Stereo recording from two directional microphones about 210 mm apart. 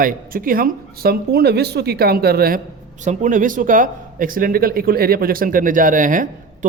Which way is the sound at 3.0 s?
35° right (ahead or behind).